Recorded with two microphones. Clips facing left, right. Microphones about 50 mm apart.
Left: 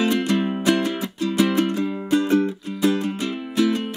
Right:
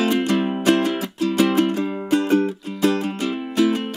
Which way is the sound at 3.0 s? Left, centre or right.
Centre.